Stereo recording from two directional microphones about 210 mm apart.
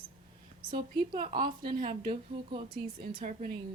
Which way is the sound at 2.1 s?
25° right (ahead or behind).